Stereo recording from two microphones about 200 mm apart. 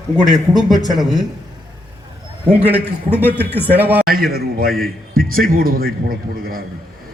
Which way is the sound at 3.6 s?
10° right (ahead or behind).